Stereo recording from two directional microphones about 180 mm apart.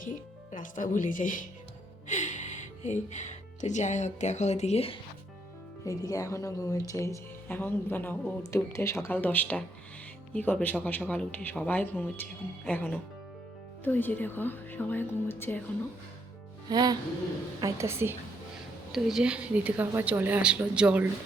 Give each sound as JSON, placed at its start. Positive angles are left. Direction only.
{"t": 0.0, "sound": "speech", "side_deg": 45}
{"t": 5.8, "sound": "speech", "side_deg": 20}
{"t": 16.6, "sound": "music", "side_deg": -25}
{"t": 17.6, "sound": "a woman's voice", "side_deg": -15}
{"t": 18.9, "sound": "a woman's voice", "side_deg": 0}